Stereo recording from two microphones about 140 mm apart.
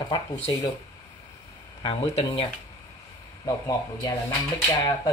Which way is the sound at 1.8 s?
40° left (ahead or behind).